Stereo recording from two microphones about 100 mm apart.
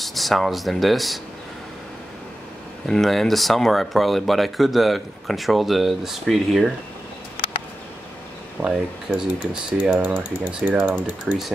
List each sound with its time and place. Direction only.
0.0 s speech: centre (ahead or behind)
2.9 s speech: centre (ahead or behind)
8.6 s speech: 5° right (ahead or behind)